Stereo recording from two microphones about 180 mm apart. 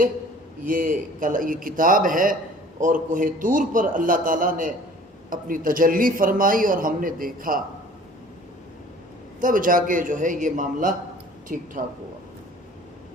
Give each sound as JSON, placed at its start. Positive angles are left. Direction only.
{"t": 0.6, "sound": "speech", "side_deg": -50}
{"t": 9.4, "sound": "speech", "side_deg": -50}